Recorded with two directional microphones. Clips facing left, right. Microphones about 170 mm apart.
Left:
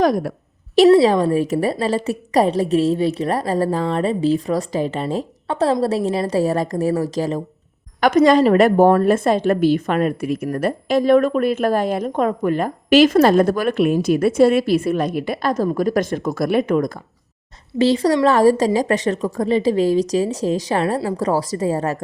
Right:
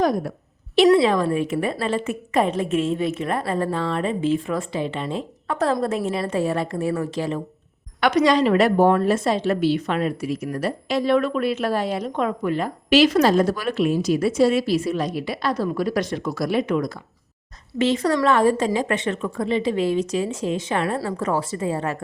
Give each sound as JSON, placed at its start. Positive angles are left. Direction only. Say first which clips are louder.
{"t": 0.0, "sound": "a woman's voice", "louder": "left 4 dB", "side_deg": 85}
{"t": 0.9, "sound": "a woman's voice", "louder": "left 4 dB", "side_deg": 30}
{"t": 17.7, "sound": "a woman's voice", "louder": "left 4 dB", "side_deg": 35}